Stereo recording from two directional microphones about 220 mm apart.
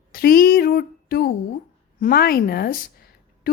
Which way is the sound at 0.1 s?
45° left (ahead or behind).